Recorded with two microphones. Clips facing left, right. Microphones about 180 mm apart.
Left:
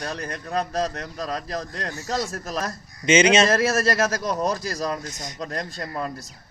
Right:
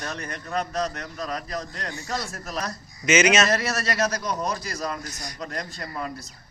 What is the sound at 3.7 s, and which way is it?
Speech, 45° left (ahead or behind).